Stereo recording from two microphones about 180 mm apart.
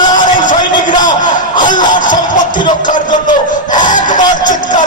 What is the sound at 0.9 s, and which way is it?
Music, 25° left (ahead or behind).